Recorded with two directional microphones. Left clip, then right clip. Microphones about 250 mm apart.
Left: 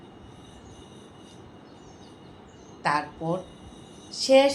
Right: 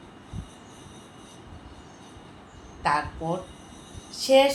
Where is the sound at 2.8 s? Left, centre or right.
Centre.